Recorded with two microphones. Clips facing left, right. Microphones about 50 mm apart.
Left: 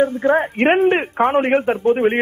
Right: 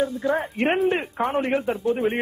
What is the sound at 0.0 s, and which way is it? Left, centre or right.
A man's voice, left.